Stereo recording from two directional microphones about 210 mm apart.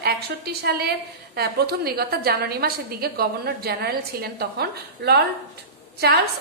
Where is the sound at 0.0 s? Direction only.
50° right (ahead or behind).